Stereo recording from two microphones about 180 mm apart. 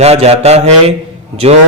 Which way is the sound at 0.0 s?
35° right (ahead or behind).